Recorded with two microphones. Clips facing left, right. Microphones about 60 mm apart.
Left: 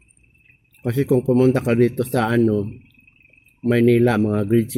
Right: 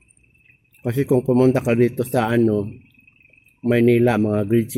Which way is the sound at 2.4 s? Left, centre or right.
Right.